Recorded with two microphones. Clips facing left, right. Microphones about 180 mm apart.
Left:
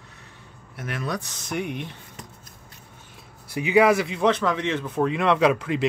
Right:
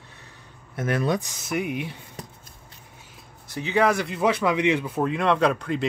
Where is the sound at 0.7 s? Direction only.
45° right (ahead or behind).